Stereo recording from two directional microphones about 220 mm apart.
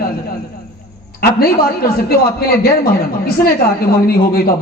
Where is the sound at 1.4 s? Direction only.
45° left (ahead or behind).